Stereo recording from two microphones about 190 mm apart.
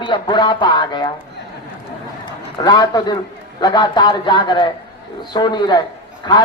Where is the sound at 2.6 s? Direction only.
20° left (ahead or behind).